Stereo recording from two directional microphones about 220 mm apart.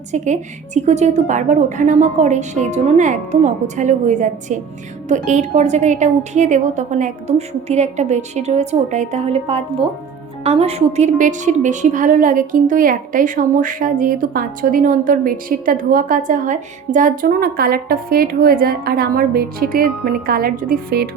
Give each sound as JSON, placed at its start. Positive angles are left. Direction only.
{"t": 0.1, "sound": "a woman's voice", "side_deg": -30}